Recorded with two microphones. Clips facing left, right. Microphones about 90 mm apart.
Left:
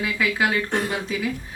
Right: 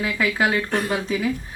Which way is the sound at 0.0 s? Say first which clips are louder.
Right 1 dB; 35° right (ahead or behind).